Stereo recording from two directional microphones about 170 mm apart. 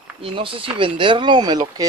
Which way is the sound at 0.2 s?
30° right (ahead or behind).